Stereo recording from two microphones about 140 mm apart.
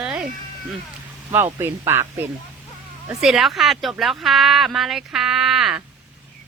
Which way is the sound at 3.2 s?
Centre (ahead or behind).